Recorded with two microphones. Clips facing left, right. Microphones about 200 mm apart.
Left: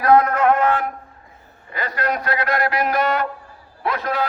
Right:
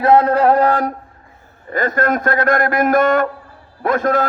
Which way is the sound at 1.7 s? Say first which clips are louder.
Right 7 dB; 50° right (ahead or behind).